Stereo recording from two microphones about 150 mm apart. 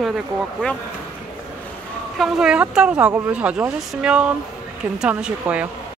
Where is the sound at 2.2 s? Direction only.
5° right (ahead or behind).